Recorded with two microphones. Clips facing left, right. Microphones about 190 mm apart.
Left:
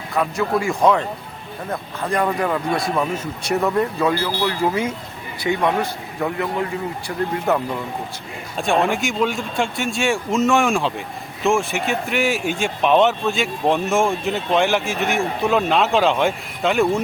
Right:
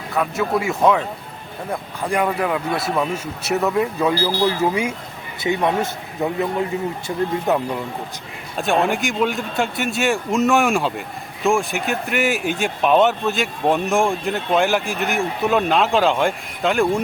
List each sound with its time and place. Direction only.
0.1 s speech: centre (ahead or behind)
4.3 s a man's voice: 15° right (ahead or behind)
8.5 s speech: centre (ahead or behind)